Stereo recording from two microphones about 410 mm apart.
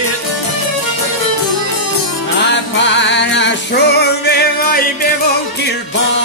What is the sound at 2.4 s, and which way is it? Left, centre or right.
Music, left.